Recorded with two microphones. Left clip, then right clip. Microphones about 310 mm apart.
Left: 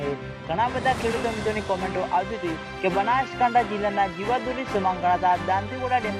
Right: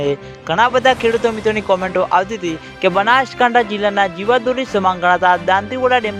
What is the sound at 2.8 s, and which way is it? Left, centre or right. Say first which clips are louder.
Music: right 10 dB; right.